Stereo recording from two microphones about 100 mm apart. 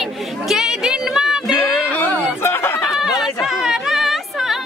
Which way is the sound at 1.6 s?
20° left (ahead or behind).